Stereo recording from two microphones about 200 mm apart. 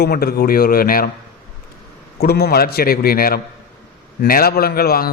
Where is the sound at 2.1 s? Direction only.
55° left (ahead or behind).